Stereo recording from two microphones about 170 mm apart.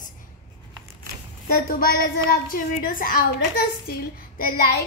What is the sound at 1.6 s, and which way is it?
A woman's voice, 60° left (ahead or behind).